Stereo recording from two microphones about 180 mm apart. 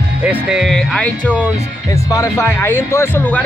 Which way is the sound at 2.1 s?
15° left (ahead or behind).